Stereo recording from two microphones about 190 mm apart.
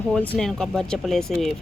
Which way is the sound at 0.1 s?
5° left (ahead or behind).